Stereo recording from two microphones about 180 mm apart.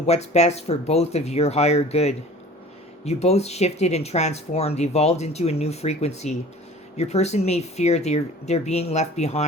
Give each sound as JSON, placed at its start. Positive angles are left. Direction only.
{"t": 0.0, "sound": "speech", "side_deg": 35}